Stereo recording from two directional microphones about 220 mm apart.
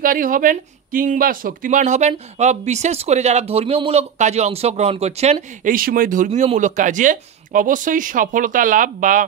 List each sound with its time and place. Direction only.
0.0 s speech: 40° right (ahead or behind)